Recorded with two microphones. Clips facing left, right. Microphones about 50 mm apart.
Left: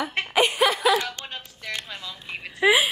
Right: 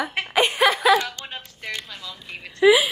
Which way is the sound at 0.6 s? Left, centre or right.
Right.